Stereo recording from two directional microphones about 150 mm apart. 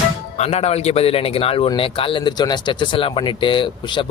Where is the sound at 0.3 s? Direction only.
45° left (ahead or behind).